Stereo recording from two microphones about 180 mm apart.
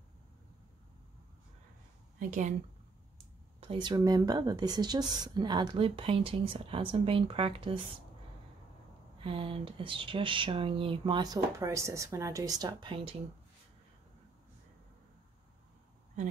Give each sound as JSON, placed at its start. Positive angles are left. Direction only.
{"t": 2.1, "sound": "speech", "side_deg": -45}
{"t": 3.6, "sound": "speech", "side_deg": -25}
{"t": 9.2, "sound": "speech", "side_deg": -30}